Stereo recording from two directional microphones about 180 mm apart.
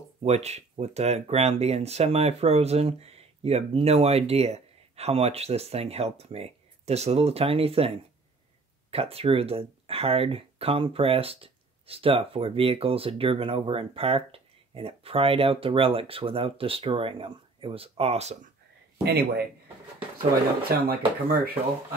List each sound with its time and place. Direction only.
0.2 s speech: 35° right (ahead or behind)
19.0 s speech: 65° right (ahead or behind)
20.9 s speech: 55° right (ahead or behind)